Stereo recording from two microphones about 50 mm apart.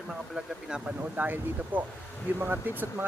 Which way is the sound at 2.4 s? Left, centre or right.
Right.